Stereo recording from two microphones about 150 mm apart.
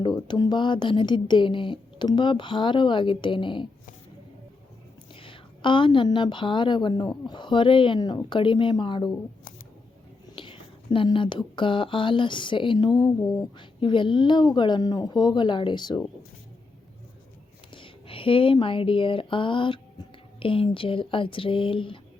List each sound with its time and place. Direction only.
0.0 s speech: 30° left (ahead or behind)
5.1 s a woman's voice: 35° left (ahead or behind)
10.3 s speech: 35° left (ahead or behind)
17.7 s speech: 35° left (ahead or behind)